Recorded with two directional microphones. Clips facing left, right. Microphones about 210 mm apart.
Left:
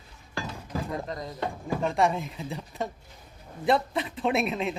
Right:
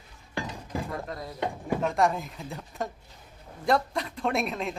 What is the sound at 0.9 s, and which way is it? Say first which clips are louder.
Speech: left 2 dB; centre (ahead or behind).